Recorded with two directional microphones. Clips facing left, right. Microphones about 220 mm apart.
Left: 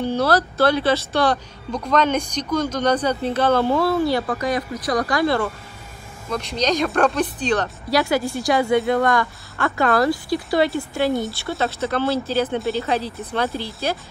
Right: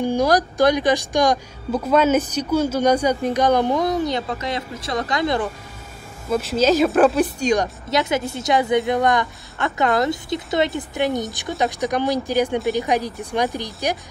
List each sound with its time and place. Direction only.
0.0 s speech: 10° right (ahead or behind)
6.3 s speech: 5° right (ahead or behind)